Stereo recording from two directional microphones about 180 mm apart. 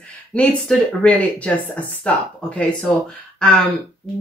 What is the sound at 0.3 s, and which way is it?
A woman's voice, 5° left (ahead or behind).